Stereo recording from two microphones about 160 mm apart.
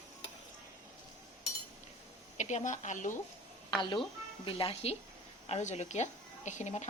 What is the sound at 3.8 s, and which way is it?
A woman's voice, 30° left (ahead or behind).